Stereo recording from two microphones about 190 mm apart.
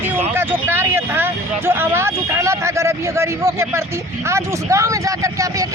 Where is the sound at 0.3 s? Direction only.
10° right (ahead or behind).